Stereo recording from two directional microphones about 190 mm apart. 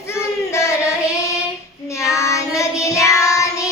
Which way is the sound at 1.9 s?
15° left (ahead or behind).